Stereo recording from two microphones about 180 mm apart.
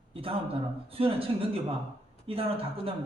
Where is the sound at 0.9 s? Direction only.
30° right (ahead or behind).